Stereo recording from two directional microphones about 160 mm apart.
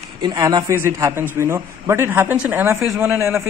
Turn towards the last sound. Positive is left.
turn(degrees=-15)  # may be behind; listen again after turning